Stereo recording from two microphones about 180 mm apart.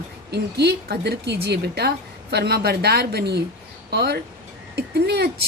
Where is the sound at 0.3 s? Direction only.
65° right (ahead or behind).